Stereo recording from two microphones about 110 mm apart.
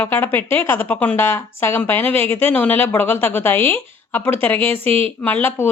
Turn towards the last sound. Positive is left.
turn(degrees=15)  # may be behind; listen again after turning